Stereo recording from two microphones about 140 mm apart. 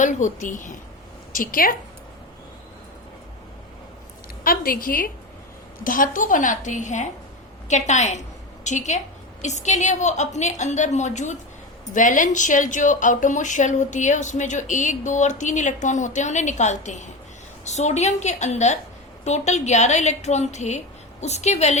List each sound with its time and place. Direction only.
0.0 s speech: 65° left (ahead or behind)
1.3 s a woman's voice: 80° left
4.4 s a woman's voice: 90° left
5.8 s a woman's voice: 75° left (ahead or behind); by 21.8 s 55° left (ahead or behind)